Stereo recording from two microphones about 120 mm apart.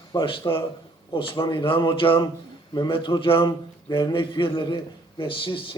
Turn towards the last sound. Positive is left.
turn(degrees=45)  # may be behind; listen again after turning